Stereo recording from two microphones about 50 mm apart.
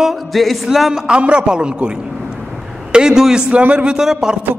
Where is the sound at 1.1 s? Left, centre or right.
Right.